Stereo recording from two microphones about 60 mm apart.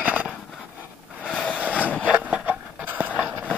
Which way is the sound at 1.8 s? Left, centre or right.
Left.